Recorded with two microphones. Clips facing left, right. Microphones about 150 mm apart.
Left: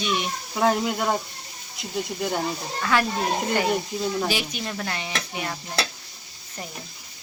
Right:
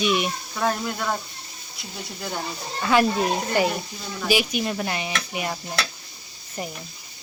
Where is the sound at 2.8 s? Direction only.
15° right (ahead or behind).